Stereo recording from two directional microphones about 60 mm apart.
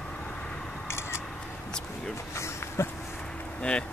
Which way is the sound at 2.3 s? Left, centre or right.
Left.